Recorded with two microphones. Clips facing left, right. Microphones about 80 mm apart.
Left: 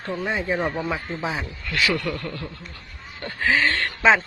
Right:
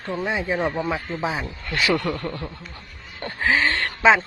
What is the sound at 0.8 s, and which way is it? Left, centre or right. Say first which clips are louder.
Speech: right 2 dB; centre.